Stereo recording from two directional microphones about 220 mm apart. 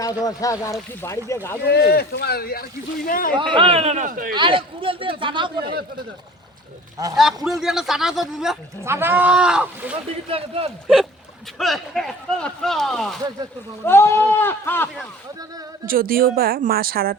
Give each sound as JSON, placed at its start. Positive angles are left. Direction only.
{"t": 0.0, "sound": "speech", "side_deg": 15}
{"t": 1.6, "sound": "speech", "side_deg": 45}
{"t": 3.5, "sound": "speech", "side_deg": -25}
{"t": 4.4, "sound": "speech", "side_deg": -25}
{"t": 7.6, "sound": "speech", "side_deg": 0}
{"t": 10.2, "sound": "speech", "side_deg": -25}
{"t": 11.5, "sound": "speech", "side_deg": 0}
{"t": 15.9, "sound": "speech", "side_deg": -40}